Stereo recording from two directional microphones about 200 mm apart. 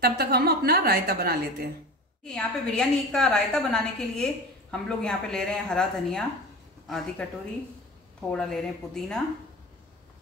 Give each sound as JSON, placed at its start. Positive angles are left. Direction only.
{"t": 0.0, "sound": "a woman's voice", "side_deg": -50}
{"t": 2.2, "sound": "a woman's voice", "side_deg": 5}